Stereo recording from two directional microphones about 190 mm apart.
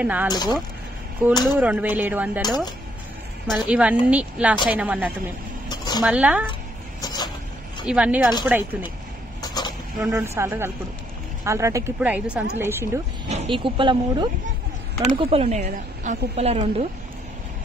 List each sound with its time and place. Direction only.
0.0 s a woman's voice: 10° right (ahead or behind)
0.3 s speech: 20° left (ahead or behind)
1.6 s a woman's voice: 10° right (ahead or behind)
3.4 s a woman's voice: 5° right (ahead or behind)
5.7 s a sound: 20° left (ahead or behind)
6.0 s a woman's voice: 5° right (ahead or behind)
7.8 s a woman's voice: 5° right (ahead or behind)
9.4 s vehicle: 20° left (ahead or behind)
10.0 s a woman's voice: 15° right (ahead or behind)
13.3 s speech: 25° right (ahead or behind)
15.0 s a woman's voice: 35° right (ahead or behind)